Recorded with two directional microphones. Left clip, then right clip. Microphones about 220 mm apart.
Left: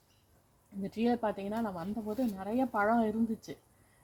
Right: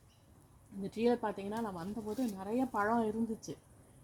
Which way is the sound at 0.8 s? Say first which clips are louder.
Left 1 dB; 35° left (ahead or behind).